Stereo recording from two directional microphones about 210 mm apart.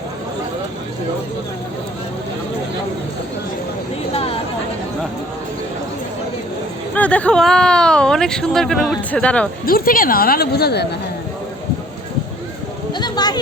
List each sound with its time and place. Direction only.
4.1 s chatter: 30° left (ahead or behind)
6.9 s speech: 5° left (ahead or behind)
9.6 s a woman's voice: 45° left (ahead or behind)
12.9 s a sound: 20° left (ahead or behind)